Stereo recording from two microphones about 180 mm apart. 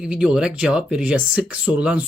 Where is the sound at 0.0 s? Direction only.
5° right (ahead or behind).